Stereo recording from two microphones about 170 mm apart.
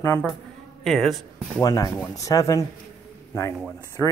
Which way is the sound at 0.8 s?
Centre (ahead or behind).